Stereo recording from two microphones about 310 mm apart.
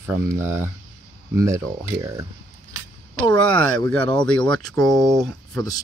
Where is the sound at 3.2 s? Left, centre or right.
Centre.